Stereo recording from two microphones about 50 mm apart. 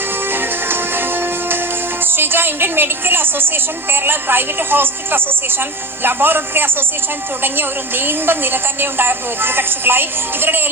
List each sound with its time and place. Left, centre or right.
0.3 s music: right
2.0 s a woman's voice: right